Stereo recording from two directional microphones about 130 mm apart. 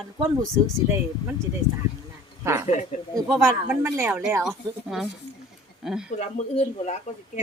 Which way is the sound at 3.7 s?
15° right (ahead or behind).